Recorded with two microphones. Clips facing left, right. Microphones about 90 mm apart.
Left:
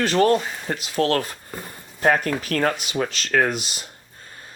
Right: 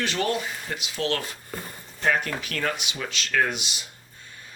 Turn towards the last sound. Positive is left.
turn(degrees=40)  # may be behind; listen again after turning